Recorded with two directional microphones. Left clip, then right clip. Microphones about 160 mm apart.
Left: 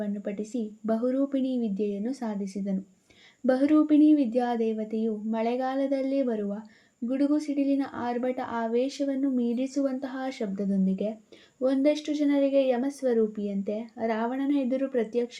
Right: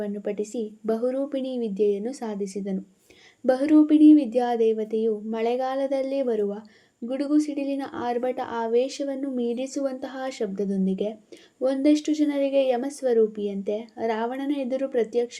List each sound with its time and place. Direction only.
0.0 s speech: 35° right (ahead or behind)